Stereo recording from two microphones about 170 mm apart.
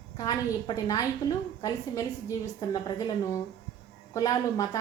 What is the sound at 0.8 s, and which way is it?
A woman's voice, 20° left (ahead or behind).